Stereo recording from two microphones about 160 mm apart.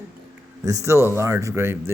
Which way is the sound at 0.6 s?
20° right (ahead or behind).